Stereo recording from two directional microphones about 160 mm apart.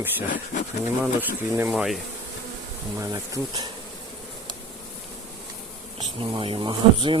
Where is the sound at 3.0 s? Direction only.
20° right (ahead or behind).